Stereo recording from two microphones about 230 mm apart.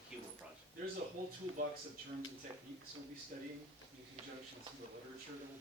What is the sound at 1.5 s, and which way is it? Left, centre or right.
Speech, right.